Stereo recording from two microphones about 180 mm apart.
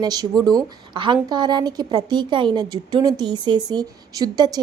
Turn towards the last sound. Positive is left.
turn(degrees=-20)  # may be behind; listen again after turning